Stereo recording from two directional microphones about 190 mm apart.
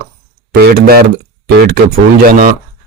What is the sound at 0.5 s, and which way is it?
Speech, 50° right (ahead or behind).